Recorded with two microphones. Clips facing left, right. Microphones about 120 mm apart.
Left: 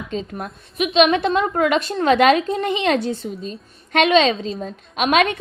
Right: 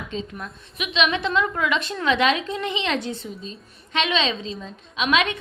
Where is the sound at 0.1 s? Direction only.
45° left (ahead or behind).